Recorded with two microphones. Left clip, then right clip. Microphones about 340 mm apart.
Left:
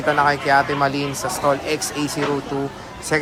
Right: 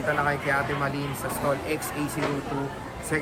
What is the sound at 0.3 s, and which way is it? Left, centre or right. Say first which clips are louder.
Speech: left 9 dB; centre.